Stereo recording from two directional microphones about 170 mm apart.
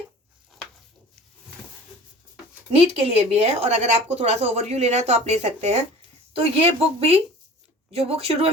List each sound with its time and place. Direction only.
2.7 s speech: 35° right (ahead or behind)